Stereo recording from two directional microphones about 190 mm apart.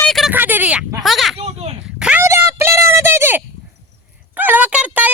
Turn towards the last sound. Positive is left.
turn(degrees=-5)  # may be behind; listen again after turning